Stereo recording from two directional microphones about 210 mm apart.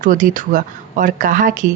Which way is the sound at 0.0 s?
40° right (ahead or behind).